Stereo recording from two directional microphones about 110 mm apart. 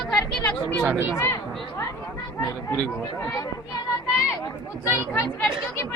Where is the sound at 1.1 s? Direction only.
25° left (ahead or behind).